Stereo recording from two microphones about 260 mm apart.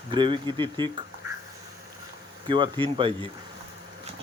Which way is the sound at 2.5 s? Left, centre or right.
Centre.